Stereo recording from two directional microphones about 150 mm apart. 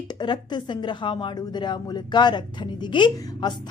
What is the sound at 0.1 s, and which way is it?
Speech, 30° left (ahead or behind).